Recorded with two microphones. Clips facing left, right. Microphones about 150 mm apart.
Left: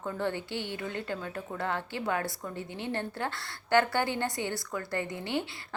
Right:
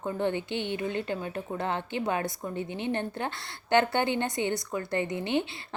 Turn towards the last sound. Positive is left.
turn(degrees=-20)  # may be behind; listen again after turning